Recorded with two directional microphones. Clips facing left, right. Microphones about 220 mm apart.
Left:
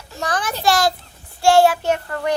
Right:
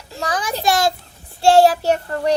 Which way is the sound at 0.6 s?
20° right (ahead or behind).